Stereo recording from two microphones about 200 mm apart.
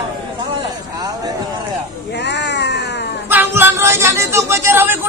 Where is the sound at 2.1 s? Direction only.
60° left (ahead or behind).